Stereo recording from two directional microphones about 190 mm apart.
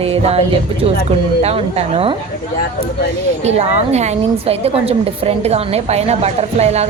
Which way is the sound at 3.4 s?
35° right (ahead or behind).